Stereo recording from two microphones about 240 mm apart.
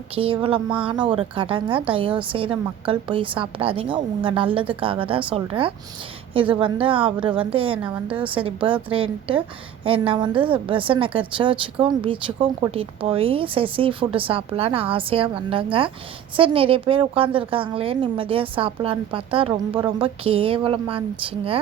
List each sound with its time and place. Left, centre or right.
0.1 s a woman's voice: right